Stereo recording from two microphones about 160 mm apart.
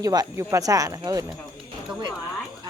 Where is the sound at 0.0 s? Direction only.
25° right (ahead or behind).